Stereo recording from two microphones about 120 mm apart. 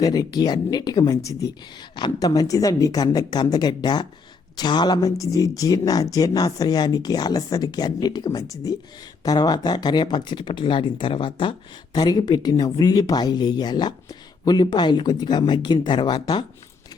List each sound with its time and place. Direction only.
0.0 s speech: 35° left (ahead or behind)
11.9 s speech: 35° left (ahead or behind)